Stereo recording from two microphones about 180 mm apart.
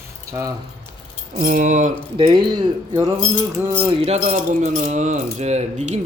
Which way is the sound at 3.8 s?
35° right (ahead or behind).